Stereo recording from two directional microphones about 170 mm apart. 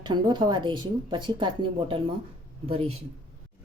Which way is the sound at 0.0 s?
25° right (ahead or behind).